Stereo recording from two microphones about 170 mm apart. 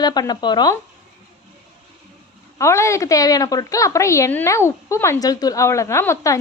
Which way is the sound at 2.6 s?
15° left (ahead or behind).